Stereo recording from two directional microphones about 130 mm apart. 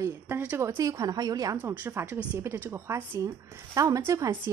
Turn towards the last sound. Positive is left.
turn(degrees=-25)  # may be behind; listen again after turning